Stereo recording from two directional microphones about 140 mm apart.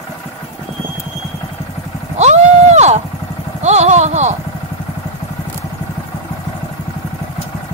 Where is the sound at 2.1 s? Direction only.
55° right (ahead or behind).